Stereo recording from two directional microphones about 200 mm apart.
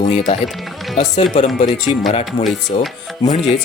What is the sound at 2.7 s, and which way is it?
Music, 25° left (ahead or behind).